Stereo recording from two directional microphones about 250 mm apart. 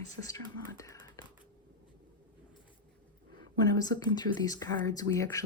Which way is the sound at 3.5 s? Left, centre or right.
Centre.